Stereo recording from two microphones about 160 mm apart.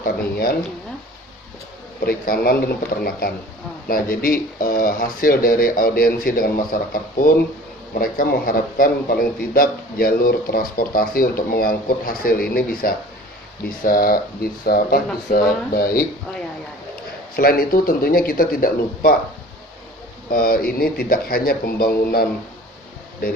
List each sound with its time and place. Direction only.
0.0 s a sound: 65° left (ahead or behind)
2.0 s speech: 70° left (ahead or behind)
17.3 s speech: 70° left (ahead or behind)
20.3 s speech: 70° left (ahead or behind)